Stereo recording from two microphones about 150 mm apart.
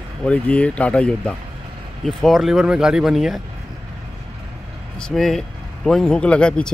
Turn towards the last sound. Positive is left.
turn(degrees=5)  # may be behind; listen again after turning